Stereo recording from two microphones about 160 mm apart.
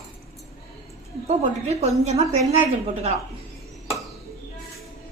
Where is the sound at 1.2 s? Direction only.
45° right (ahead or behind).